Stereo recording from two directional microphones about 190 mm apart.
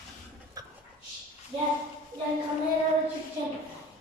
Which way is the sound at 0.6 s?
20° right (ahead or behind).